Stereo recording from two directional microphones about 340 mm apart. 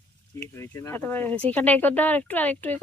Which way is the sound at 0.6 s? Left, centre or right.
Centre.